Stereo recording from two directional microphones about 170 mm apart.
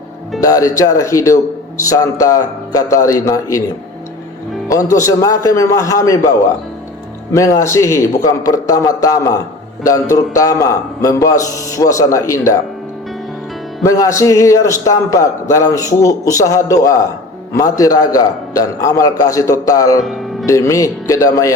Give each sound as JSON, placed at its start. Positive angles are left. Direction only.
{"t": 0.3, "sound": "a man's voice", "side_deg": 20}
{"t": 4.7, "sound": "a man's voice", "side_deg": 20}
{"t": 7.3, "sound": "a man's voice", "side_deg": 15}
{"t": 13.8, "sound": "a man's voice", "side_deg": 20}
{"t": 20.0, "sound": "speech", "side_deg": 0}
{"t": 20.5, "sound": "a man's voice", "side_deg": 20}